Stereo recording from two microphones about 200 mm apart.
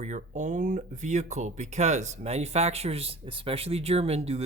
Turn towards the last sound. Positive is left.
turn(degrees=-30)  # may be behind; listen again after turning